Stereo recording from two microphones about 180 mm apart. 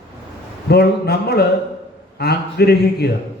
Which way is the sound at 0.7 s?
60° left (ahead or behind).